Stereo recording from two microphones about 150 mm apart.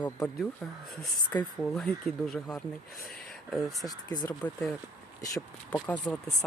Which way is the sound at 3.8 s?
25° left (ahead or behind).